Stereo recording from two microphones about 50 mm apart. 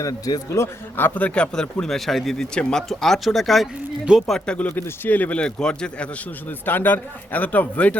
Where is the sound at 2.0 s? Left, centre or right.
Centre.